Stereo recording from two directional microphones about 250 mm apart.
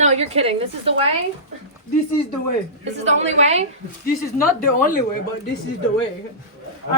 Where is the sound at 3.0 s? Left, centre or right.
Right.